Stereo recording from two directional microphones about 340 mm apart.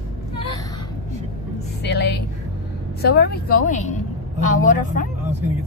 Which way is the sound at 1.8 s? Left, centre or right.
Left.